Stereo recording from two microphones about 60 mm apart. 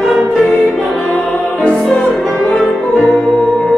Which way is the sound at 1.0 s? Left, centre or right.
Left.